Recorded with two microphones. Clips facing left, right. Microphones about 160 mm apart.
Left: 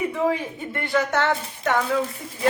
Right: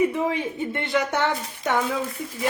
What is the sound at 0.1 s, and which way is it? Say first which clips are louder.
A woman's voice: left 1 dB; 20° right (ahead or behind).